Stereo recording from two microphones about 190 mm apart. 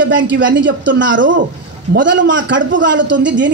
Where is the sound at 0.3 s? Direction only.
75° right (ahead or behind).